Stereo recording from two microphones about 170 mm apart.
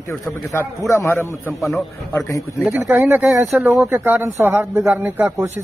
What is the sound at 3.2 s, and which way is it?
Speech, centre (ahead or behind).